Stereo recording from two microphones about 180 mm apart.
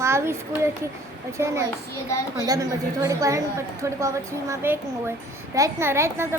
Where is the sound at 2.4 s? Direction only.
20° right (ahead or behind).